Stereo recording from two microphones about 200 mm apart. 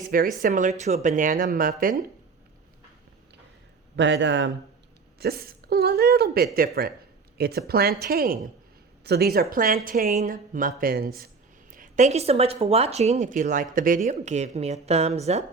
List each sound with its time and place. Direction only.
0.3 s speech: 40° right (ahead or behind)
3.9 s speech: 65° right (ahead or behind)
5.2 s speech: 50° right (ahead or behind); by 15.4 s 35° right (ahead or behind)